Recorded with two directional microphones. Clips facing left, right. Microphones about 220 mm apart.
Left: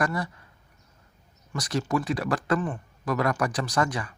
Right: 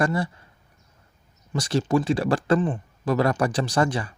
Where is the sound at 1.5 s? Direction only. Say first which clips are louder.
Right 5 dB; 30° right (ahead or behind).